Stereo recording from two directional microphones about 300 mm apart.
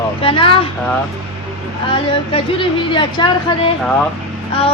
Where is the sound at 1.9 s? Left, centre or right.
Centre.